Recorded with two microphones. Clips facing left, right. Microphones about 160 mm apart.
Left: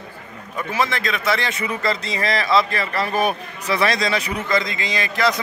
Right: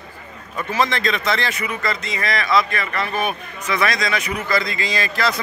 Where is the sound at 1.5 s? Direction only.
30° left (ahead or behind).